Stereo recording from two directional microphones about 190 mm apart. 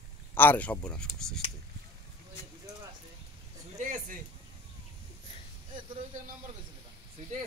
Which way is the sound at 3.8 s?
40° right (ahead or behind).